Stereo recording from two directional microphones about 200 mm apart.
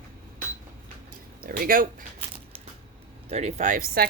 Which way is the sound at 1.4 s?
45° right (ahead or behind).